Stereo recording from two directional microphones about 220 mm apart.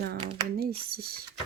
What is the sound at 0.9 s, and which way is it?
Speech, 40° right (ahead or behind).